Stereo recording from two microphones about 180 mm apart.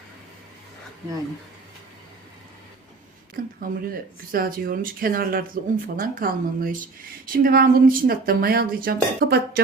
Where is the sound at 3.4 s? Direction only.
50° right (ahead or behind).